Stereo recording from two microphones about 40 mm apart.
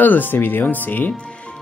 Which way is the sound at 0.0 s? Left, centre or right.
Left.